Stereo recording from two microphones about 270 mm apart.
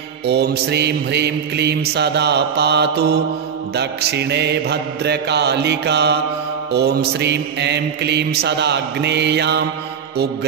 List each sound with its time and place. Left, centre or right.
0.3 s mantra: right